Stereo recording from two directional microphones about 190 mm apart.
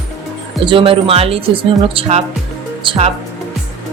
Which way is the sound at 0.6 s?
25° right (ahead or behind).